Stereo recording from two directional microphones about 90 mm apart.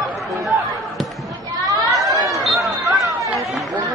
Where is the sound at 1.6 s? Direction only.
45° right (ahead or behind).